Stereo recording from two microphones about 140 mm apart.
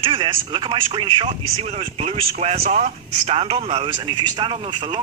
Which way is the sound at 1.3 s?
50° right (ahead or behind).